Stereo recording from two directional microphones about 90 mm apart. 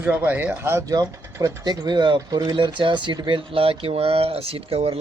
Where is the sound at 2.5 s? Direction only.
65° right (ahead or behind).